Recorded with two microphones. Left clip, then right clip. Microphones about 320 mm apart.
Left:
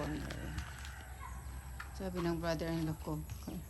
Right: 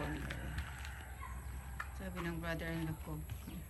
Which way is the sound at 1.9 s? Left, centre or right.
Centre.